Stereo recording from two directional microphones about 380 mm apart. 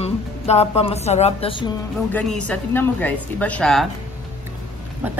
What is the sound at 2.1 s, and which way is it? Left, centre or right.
Speech, centre.